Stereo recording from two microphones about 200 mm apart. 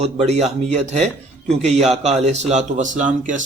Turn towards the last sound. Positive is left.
turn(degrees=-40)  # may be behind; listen again after turning